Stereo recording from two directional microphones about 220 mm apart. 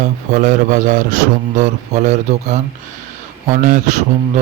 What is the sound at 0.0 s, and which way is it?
A man's voice, 35° right (ahead or behind).